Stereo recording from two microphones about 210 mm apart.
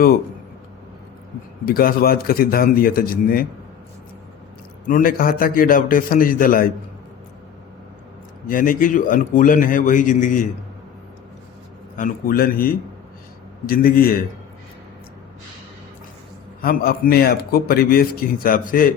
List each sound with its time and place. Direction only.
1.6 s a man's voice: 45° left (ahead or behind)
4.9 s a man's voice: 40° left (ahead or behind)
8.4 s a man's voice: 40° left (ahead or behind)
11.9 s a man's voice: 40° left (ahead or behind)
16.6 s a man's voice: 45° left (ahead or behind)